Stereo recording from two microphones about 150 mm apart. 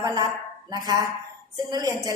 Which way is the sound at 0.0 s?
25° right (ahead or behind).